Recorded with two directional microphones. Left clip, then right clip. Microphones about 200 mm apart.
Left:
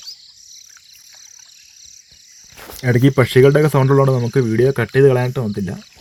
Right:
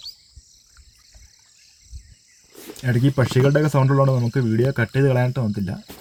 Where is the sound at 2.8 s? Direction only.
25° left (ahead or behind).